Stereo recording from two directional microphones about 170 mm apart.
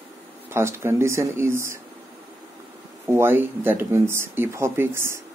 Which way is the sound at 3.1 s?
15° right (ahead or behind).